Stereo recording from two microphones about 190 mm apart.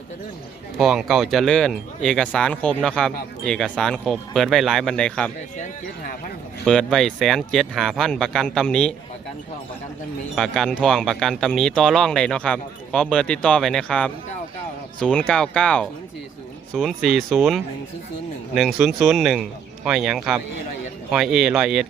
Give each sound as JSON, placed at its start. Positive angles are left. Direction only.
{"t": 0.8, "sound": "speech", "side_deg": 0}
{"t": 5.5, "sound": "speech", "side_deg": 40}
{"t": 6.7, "sound": "speech", "side_deg": 5}
{"t": 10.3, "sound": "speech", "side_deg": 0}